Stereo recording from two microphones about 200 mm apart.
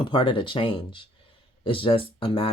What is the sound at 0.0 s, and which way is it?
Speech, 25° left (ahead or behind).